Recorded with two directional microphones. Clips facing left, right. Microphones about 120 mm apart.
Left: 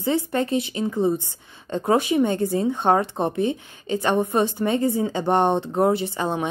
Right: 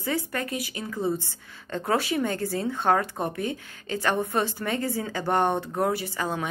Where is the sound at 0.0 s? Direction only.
25° left (ahead or behind).